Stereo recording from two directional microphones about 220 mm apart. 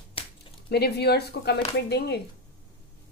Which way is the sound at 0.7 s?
45° left (ahead or behind).